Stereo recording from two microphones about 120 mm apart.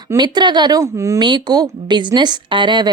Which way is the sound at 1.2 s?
40° right (ahead or behind).